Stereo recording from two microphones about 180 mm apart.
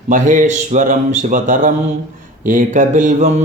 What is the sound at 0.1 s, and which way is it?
Speech, 45° right (ahead or behind).